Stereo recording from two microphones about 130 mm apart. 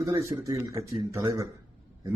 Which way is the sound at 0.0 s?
25° right (ahead or behind).